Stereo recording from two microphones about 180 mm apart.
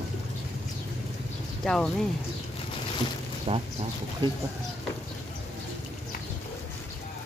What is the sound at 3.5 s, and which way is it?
Speech, 30° right (ahead or behind).